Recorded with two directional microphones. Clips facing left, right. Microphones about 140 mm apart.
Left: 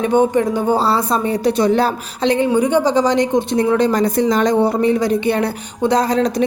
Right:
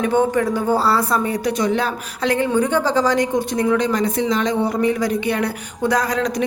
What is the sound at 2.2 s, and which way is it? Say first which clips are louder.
A woman's voice: left 3 dB; 20° left (ahead or behind).